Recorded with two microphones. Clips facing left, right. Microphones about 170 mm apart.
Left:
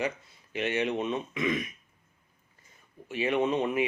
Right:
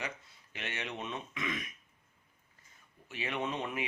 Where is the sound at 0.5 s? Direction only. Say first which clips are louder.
Left 12 dB; 15° left (ahead or behind).